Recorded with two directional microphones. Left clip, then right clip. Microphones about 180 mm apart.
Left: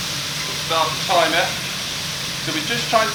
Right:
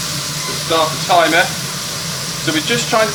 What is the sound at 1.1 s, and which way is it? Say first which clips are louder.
Speech: right 5 dB; 25° left (ahead or behind).